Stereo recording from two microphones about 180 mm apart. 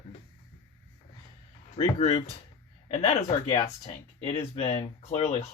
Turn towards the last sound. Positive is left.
turn(degrees=35)  # may be behind; listen again after turning